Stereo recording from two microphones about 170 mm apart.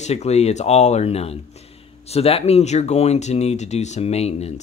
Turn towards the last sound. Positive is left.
turn(degrees=40)  # may be behind; listen again after turning